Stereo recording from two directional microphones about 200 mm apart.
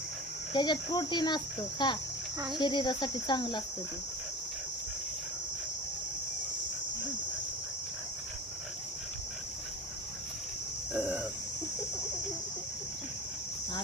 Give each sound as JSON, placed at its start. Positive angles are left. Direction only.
{"t": 0.5, "sound": "speech", "side_deg": 20}
{"t": 10.9, "sound": "speech", "side_deg": -5}